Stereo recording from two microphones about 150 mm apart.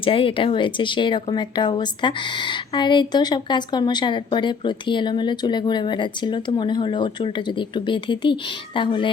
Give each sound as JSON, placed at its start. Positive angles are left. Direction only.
{"t": 0.0, "sound": "speech", "side_deg": 35}